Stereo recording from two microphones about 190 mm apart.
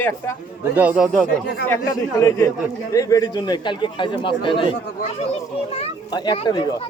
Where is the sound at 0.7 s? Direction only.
5° right (ahead or behind).